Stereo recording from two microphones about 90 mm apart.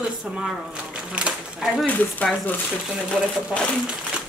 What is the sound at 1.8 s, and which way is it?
Speech, 15° left (ahead or behind).